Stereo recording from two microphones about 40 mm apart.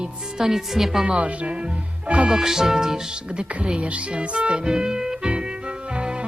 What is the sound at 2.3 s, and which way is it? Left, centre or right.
Speech, centre.